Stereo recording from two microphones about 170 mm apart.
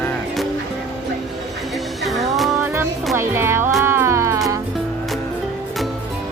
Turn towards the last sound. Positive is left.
turn(degrees=-20)  # may be behind; listen again after turning